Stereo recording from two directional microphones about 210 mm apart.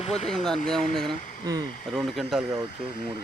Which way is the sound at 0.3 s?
Centre (ahead or behind).